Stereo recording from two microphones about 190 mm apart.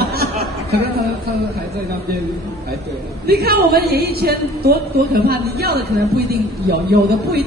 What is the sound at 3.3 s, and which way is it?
Speech, 55° right (ahead or behind).